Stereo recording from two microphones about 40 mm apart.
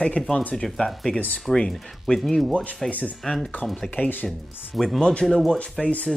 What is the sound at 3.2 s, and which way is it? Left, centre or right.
Speech, centre.